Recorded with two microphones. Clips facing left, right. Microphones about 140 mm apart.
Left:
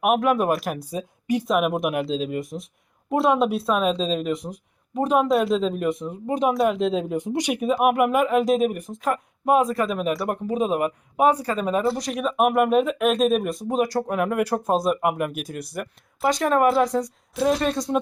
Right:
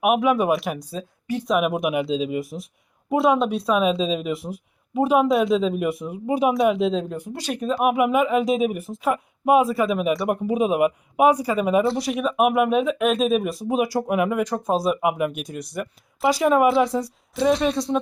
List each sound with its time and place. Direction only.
0.0 s speech: centre (ahead or behind)
0.9 s speech: 15° left (ahead or behind)
1.5 s speech: centre (ahead or behind)
7.2 s speech: 20° left (ahead or behind)
7.8 s speech: centre (ahead or behind)
14.3 s speech: 5° left (ahead or behind)